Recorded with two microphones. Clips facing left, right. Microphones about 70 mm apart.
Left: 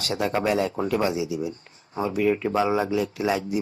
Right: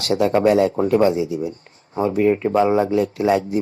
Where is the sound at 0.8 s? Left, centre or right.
Right.